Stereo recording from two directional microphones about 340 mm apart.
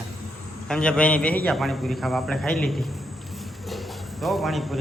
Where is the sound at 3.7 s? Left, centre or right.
Centre.